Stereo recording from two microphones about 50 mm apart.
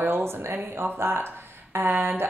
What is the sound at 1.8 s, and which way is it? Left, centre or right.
Speech, right.